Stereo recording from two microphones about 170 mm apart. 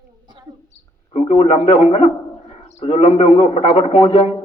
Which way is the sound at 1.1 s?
35° left (ahead or behind).